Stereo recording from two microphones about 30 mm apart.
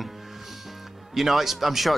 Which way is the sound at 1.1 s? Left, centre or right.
Centre.